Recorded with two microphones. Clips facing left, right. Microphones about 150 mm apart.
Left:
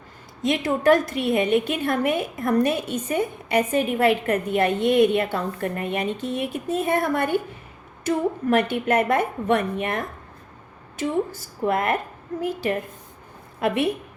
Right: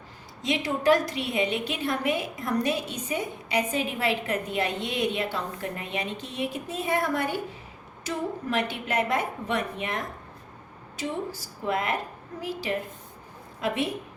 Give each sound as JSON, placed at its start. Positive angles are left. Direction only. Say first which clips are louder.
{"t": 0.4, "sound": "a woman's voice", "louder": "left 4 dB", "side_deg": 50}